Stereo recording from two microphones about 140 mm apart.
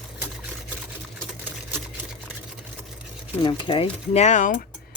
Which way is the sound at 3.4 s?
35° left (ahead or behind).